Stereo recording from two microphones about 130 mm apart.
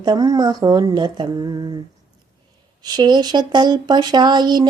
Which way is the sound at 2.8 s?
35° right (ahead or behind).